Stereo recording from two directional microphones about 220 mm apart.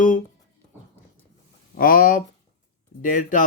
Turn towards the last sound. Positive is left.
turn(degrees=35)  # may be behind; listen again after turning